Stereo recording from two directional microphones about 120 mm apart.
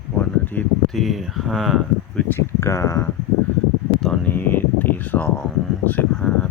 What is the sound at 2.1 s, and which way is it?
Speech, 20° left (ahead or behind).